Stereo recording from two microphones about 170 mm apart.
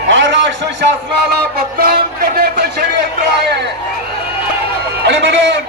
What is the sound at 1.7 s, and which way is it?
A man's voice, 60° right (ahead or behind).